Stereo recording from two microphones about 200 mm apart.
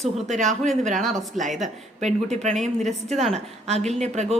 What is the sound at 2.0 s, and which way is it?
Speech, 35° right (ahead or behind).